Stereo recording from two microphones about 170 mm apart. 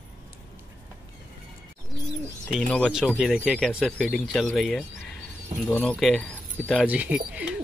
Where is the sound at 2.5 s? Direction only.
5° left (ahead or behind).